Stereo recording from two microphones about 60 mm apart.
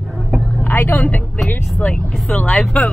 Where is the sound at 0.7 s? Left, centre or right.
Left.